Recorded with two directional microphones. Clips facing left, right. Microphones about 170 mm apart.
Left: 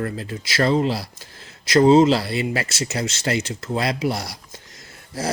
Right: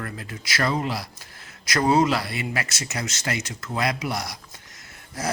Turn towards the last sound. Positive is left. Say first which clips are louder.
# left 3 dB
turn(degrees=30)  # may be behind; listen again after turning